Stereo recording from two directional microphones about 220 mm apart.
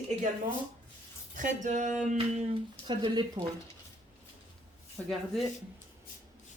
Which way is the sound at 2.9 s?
20° right (ahead or behind).